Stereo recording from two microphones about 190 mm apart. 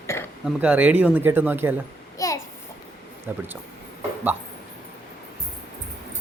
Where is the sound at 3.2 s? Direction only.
10° right (ahead or behind).